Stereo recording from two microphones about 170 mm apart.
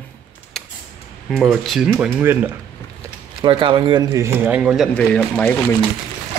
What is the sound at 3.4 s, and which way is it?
Speech, 30° right (ahead or behind).